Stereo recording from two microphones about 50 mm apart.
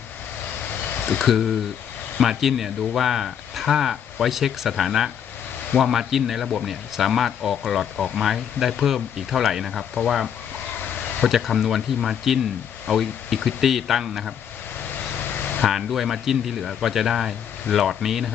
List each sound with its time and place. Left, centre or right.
0.6 s a sound: left
1.2 s speech: centre
10.8 s a sound: left
11.3 s speech: centre
14.8 s vehicle: left
15.6 s speech: centre